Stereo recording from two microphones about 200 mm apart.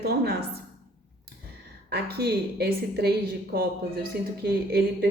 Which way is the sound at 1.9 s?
50° right (ahead or behind).